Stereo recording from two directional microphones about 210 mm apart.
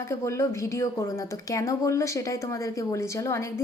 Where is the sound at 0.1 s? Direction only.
15° left (ahead or behind).